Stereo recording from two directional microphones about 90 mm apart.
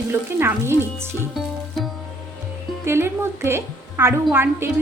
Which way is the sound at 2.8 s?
30° right (ahead or behind).